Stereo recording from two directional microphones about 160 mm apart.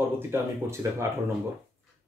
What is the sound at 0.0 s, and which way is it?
Speech, 15° right (ahead or behind).